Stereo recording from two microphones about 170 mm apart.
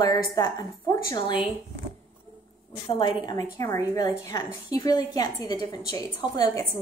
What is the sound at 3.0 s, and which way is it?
A woman's voice, 25° left (ahead or behind).